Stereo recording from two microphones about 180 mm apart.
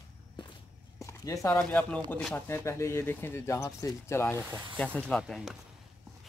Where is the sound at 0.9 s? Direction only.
15° left (ahead or behind).